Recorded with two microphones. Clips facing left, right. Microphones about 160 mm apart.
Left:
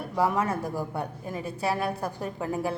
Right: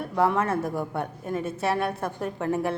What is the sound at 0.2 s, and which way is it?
Speech, 10° left (ahead or behind).